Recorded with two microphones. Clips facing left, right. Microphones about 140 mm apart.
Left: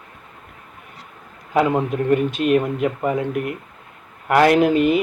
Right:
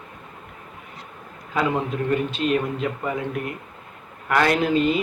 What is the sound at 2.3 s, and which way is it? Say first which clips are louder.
Speech: left 4 dB; 55° left (ahead or behind).